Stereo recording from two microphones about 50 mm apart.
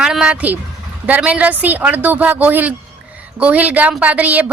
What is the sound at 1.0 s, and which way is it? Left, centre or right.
A woman's voice, right.